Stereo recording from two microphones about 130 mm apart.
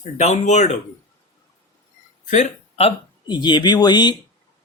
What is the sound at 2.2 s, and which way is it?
Speech, 70° left (ahead or behind).